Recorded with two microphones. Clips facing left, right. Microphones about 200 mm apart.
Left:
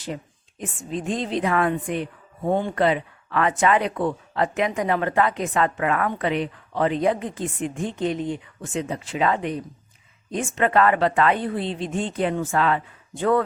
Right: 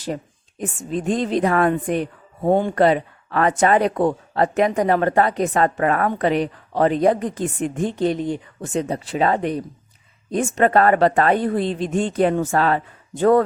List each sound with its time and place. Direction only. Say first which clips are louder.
0.6 s speech: right 5 dB; 45° right (ahead or behind)